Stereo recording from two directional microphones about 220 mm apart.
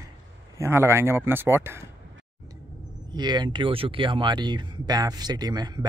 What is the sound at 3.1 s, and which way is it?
Speech, 20° right (ahead or behind).